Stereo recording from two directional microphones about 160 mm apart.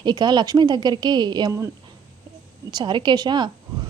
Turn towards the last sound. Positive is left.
turn(degrees=-25)  # may be behind; listen again after turning